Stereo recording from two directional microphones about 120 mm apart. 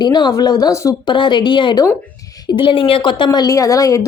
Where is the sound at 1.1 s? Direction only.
40° left (ahead or behind).